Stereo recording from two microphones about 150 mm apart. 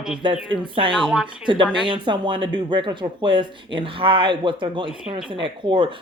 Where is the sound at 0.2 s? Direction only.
30° right (ahead or behind).